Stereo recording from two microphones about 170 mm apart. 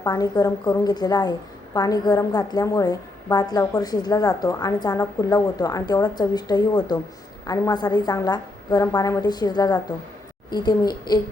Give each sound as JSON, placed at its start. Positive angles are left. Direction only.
{"t": 0.0, "sound": "a woman's voice", "side_deg": 20}